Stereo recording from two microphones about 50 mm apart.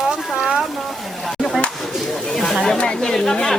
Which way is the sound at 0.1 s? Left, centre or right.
Centre.